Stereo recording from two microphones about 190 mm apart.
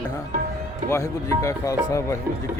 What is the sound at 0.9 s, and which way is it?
Speech, 15° left (ahead or behind).